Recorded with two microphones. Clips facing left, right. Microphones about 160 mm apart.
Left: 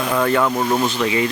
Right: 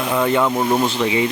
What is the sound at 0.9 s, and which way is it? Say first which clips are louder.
Speech: right 1 dB; 20° right (ahead or behind).